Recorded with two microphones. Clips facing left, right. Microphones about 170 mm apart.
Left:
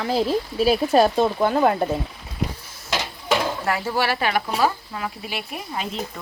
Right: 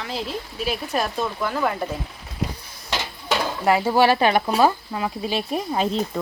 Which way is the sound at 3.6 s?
20° right (ahead or behind).